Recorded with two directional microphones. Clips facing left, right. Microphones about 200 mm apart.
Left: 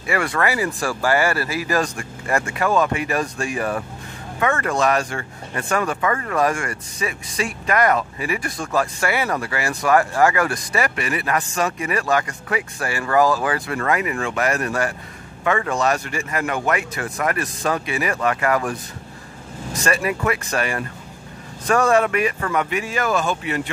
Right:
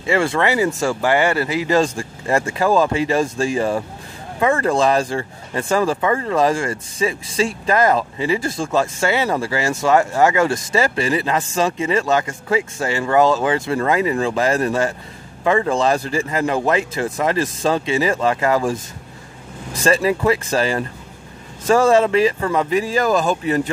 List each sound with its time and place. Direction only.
0.0 s speech: 25° right (ahead or behind)